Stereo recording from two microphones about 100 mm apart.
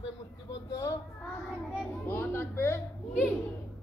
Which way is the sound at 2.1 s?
25° left (ahead or behind).